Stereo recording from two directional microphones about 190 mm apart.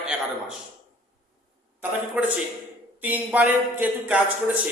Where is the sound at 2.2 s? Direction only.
5° right (ahead or behind).